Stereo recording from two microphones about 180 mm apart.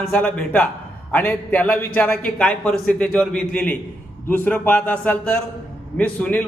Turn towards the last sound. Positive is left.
turn(degrees=10)  # may be behind; listen again after turning